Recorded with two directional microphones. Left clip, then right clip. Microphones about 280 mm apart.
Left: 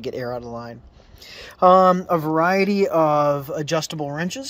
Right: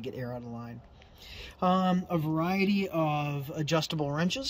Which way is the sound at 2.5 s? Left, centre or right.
Left.